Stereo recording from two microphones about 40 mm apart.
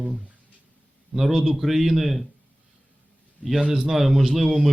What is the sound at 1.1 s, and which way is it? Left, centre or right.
Speech, centre.